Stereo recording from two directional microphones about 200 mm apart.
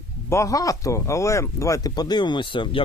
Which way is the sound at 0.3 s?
15° left (ahead or behind).